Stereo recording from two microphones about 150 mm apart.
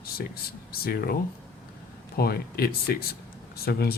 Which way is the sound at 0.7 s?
85° left.